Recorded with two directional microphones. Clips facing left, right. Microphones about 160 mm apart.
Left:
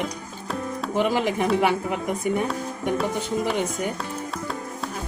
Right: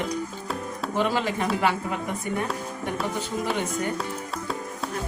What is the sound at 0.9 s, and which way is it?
Speech, 15° left (ahead or behind).